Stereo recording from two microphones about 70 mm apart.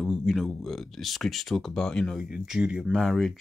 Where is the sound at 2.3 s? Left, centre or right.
Centre.